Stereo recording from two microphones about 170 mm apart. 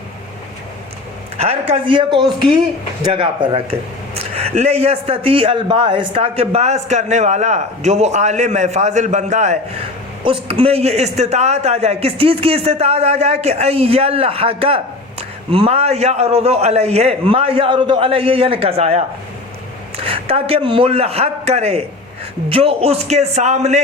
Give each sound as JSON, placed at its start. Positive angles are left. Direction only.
{"t": 1.4, "sound": "speech", "side_deg": -35}